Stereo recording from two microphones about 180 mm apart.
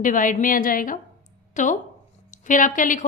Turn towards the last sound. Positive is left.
turn(degrees=45)  # may be behind; listen again after turning